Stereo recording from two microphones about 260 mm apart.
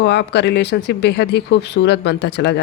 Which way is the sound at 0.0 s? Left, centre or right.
Left.